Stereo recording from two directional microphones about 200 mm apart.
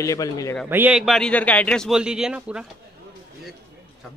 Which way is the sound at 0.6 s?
10° right (ahead or behind).